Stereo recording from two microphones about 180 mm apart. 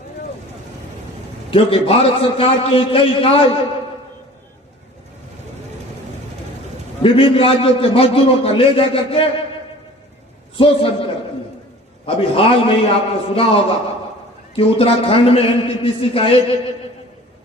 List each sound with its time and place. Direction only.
1.5 s a man's voice: 30° left (ahead or behind)
7.0 s a man's voice: 30° left (ahead or behind)
10.6 s a man's voice: 30° left (ahead or behind)